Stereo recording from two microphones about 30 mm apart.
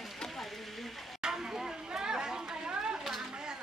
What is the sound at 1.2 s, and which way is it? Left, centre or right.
Chatter, centre.